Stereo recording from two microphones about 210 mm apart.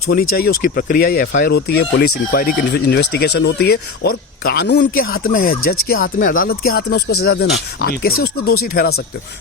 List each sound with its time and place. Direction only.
0.1 s speech: 45° left (ahead or behind)